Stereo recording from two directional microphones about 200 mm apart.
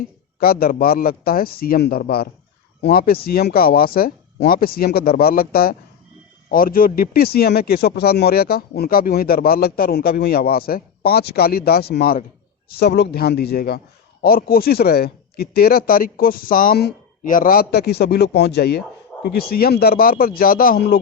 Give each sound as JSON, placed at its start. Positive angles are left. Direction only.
{"t": 0.0, "sound": "a man's voice", "side_deg": 50}